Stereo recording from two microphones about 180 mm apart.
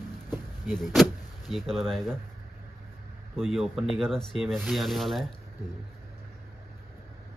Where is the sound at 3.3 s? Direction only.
Centre (ahead or behind).